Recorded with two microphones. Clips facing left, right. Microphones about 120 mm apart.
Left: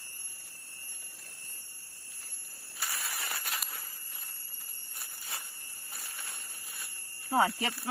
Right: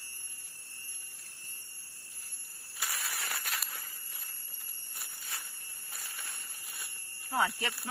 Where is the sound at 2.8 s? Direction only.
5° right (ahead or behind).